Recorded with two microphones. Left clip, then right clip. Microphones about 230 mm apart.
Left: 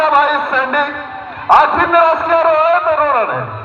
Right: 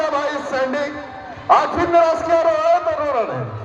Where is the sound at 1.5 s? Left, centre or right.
Centre.